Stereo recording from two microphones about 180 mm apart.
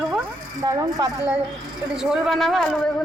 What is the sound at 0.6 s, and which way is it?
Speech, 20° right (ahead or behind).